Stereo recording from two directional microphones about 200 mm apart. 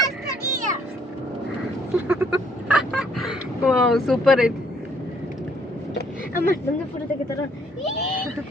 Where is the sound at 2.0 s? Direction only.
10° right (ahead or behind).